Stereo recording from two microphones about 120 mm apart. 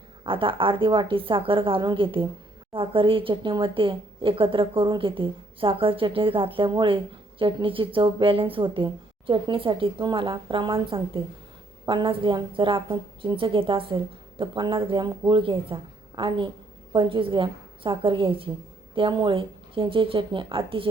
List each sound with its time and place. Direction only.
0.3 s a woman's voice: 45° right (ahead or behind)